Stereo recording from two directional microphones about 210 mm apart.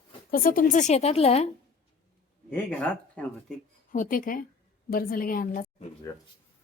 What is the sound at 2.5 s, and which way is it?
Speech, 5° left (ahead or behind).